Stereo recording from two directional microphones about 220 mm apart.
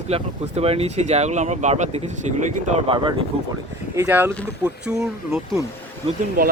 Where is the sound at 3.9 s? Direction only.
10° right (ahead or behind).